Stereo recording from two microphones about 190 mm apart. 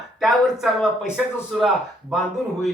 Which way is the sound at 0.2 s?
Centre (ahead or behind).